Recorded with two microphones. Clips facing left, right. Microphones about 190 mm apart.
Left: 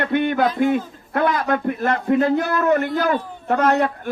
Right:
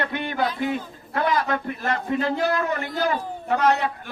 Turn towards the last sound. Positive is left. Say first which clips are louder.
# left 3 dB
turn(degrees=55)  # may be behind; listen again after turning